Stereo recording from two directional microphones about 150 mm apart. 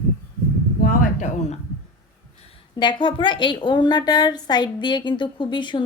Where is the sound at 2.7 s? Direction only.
30° left (ahead or behind).